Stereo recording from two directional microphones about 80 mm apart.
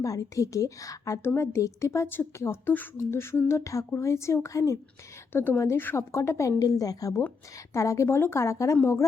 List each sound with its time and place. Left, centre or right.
0.0 s a woman's voice: left
5.3 s speech: left
6.6 s a woman's voice: left